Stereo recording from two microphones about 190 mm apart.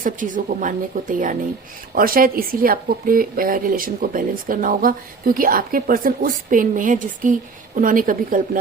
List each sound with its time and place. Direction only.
0.0 s speech: 45° right (ahead or behind)